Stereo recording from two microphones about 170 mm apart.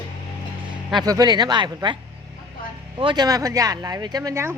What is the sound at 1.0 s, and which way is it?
Speech, 20° right (ahead or behind).